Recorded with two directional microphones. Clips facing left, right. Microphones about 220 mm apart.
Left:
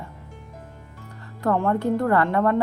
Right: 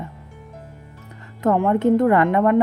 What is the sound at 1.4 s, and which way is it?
A woman's voice, 20° right (ahead or behind).